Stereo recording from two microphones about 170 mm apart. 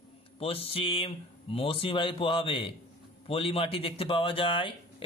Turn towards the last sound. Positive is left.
turn(degrees=30)  # may be behind; listen again after turning